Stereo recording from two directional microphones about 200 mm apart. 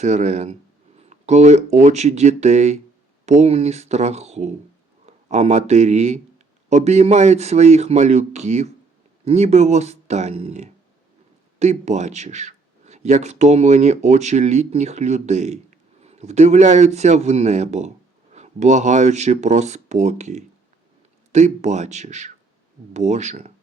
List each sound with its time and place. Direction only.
0.0 s speech: 35° right (ahead or behind)